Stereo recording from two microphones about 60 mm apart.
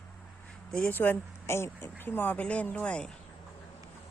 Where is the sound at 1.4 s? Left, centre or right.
Left.